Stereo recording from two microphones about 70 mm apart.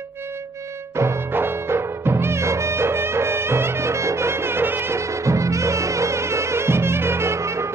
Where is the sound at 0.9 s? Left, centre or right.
Right.